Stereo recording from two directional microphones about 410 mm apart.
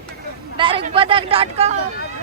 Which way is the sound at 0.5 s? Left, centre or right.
Centre.